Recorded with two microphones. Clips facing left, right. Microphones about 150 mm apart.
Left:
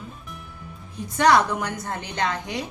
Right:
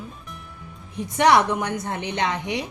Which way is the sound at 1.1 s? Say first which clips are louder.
Right 1 dB; 20° right (ahead or behind).